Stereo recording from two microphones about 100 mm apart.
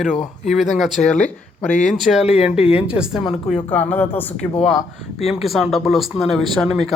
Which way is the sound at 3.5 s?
15° left (ahead or behind).